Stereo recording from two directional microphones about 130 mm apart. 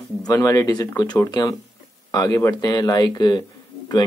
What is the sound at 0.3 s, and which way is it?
A man's voice, 25° left (ahead or behind).